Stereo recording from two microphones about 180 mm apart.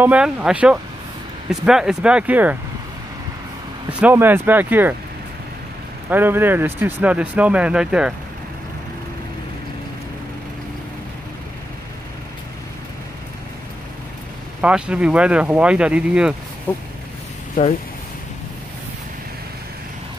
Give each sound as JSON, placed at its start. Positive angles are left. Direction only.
{"t": 0.0, "sound": "speech", "side_deg": -5}
{"t": 4.0, "sound": "speech", "side_deg": -10}
{"t": 6.0, "sound": "speech", "side_deg": -10}
{"t": 14.6, "sound": "speech", "side_deg": -5}
{"t": 16.7, "sound": "speech", "side_deg": 10}
{"t": 17.6, "sound": "speech", "side_deg": 50}